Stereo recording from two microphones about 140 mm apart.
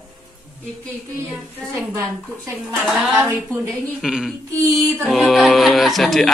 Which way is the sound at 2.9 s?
10° right (ahead or behind).